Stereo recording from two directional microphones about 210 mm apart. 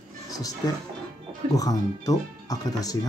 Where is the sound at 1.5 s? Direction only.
15° left (ahead or behind).